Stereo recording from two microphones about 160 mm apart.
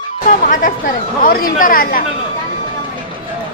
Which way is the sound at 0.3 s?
55° left (ahead or behind).